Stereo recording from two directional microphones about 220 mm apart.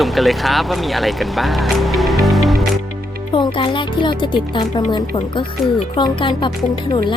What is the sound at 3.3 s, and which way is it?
Speech, 20° left (ahead or behind).